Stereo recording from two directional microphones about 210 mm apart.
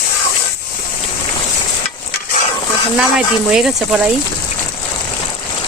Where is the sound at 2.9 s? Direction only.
5° right (ahead or behind).